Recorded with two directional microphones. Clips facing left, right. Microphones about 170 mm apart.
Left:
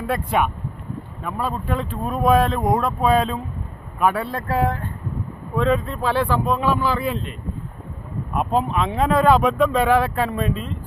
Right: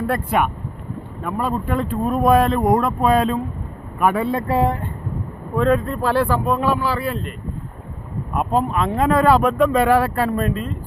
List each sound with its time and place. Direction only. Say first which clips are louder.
0.1 s speech: left 2 dB; 5° right (ahead or behind)
4.3 s speech: right 3 dB; 25° right (ahead or behind)
5.5 s speech: right 2 dB; 5° right (ahead or behind)
8.3 s speech: right 1 dB; 5° right (ahead or behind)
10.5 s speech: right 2 dB; 50° right (ahead or behind)